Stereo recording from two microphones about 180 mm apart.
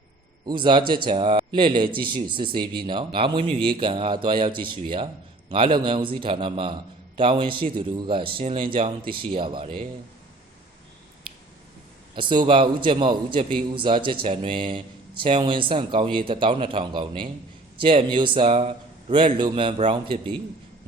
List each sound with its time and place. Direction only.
0.4 s a man's voice: 25° right (ahead or behind)
12.1 s a man's voice: 25° right (ahead or behind)